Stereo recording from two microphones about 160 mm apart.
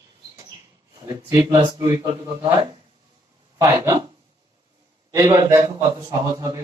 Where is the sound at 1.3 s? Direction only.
25° right (ahead or behind).